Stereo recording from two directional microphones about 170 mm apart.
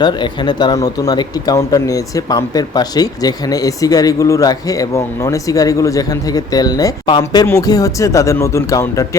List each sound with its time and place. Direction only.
0.0 s speech: 25° left (ahead or behind)